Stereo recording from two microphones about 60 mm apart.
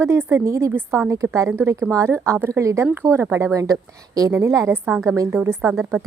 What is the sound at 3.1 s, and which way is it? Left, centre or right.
Speech, right.